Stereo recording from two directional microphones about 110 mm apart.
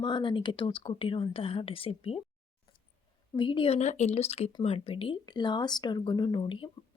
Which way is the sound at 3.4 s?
50° left (ahead or behind).